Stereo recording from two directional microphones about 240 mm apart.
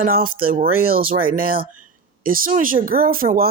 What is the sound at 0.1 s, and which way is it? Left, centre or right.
Speech, right.